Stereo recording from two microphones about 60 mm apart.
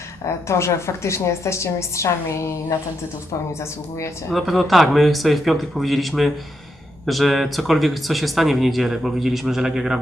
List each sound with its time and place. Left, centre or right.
0.4 s a woman's voice: left
4.3 s speech: centre